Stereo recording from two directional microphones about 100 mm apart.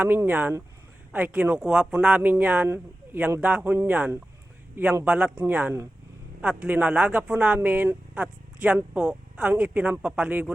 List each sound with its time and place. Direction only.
0.0 s speech: 20° right (ahead or behind)
2.6 s speech: 25° right (ahead or behind)
3.4 s speech: 15° right (ahead or behind)